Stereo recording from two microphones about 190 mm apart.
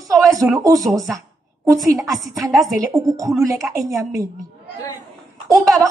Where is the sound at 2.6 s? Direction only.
15° right (ahead or behind).